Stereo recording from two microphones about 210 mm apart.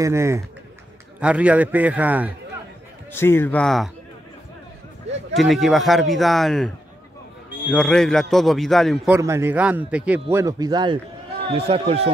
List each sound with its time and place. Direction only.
0.0 s a man's voice: 15° right (ahead or behind)
3.1 s speech: 10° left (ahead or behind)
5.3 s speech: centre (ahead or behind)
7.7 s speech: 5° left (ahead or behind)
9.1 s a man's voice: 10° right (ahead or behind)
10.3 s speech: 15° right (ahead or behind)